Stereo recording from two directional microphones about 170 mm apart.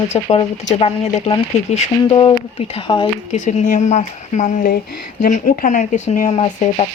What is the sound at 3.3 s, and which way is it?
Speech, 45° left (ahead or behind).